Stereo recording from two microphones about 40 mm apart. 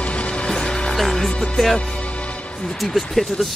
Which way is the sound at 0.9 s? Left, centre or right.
Centre.